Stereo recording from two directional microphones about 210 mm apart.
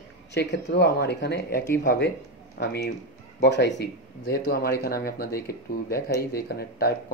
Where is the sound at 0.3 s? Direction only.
55° left (ahead or behind).